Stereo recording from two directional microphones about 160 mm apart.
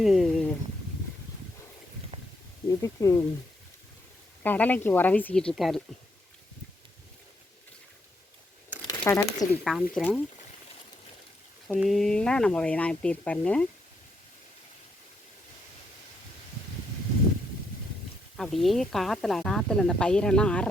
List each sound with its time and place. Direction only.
0.0 s speech: centre (ahead or behind)
2.6 s speech: 20° left (ahead or behind)
4.4 s speech: 10° left (ahead or behind)
8.9 s speech: 20° left (ahead or behind)
9.9 s speech: 5° left (ahead or behind)
11.7 s speech: centre (ahead or behind)
18.3 s speech: centre (ahead or behind)